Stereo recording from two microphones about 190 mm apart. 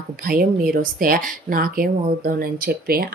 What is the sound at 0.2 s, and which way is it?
Speech, 50° right (ahead or behind).